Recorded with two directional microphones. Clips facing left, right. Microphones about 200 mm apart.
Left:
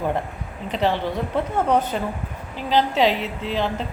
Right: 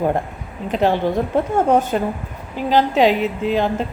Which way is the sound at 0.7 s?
50° right (ahead or behind).